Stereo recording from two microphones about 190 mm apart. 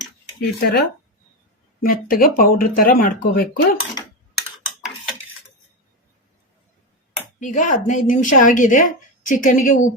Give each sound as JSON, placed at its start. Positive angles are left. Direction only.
{"t": 0.4, "sound": "speech", "side_deg": 55}
{"t": 7.3, "sound": "speech", "side_deg": 40}